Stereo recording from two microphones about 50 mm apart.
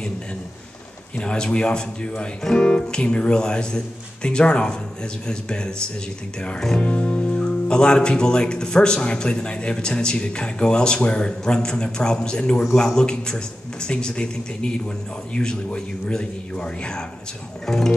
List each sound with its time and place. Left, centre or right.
1.1 s speech: centre
6.8 s speech: left